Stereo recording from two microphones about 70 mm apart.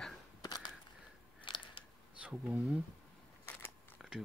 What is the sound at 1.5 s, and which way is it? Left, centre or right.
Scissors, left.